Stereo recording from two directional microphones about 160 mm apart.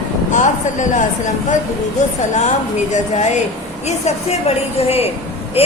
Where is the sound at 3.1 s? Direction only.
45° left (ahead or behind).